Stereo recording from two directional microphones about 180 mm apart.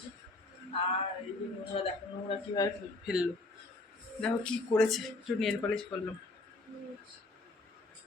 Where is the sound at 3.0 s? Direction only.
5° right (ahead or behind).